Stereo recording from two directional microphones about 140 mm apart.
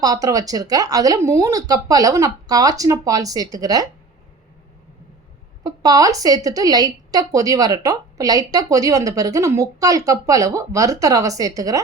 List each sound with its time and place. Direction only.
0.0 s a woman's voice: 25° right (ahead or behind)
5.6 s a woman's voice: 25° right (ahead or behind)